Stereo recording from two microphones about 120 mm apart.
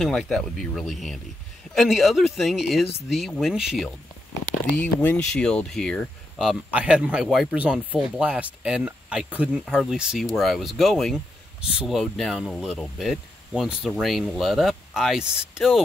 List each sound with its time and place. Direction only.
0.0 s speech: centre (ahead or behind)
4.7 s speech: 15° left (ahead or behind)
6.7 s speech: 10° right (ahead or behind)